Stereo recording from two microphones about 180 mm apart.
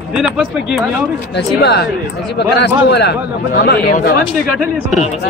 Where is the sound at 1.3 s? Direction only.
65° left (ahead or behind).